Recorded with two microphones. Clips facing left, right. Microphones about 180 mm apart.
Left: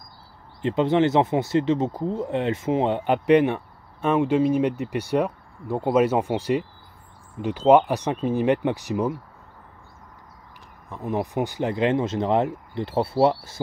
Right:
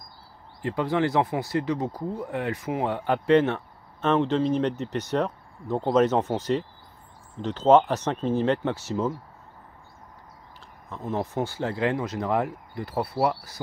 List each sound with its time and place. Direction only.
0.6 s speech: 25° left (ahead or behind)
10.9 s speech: 15° left (ahead or behind)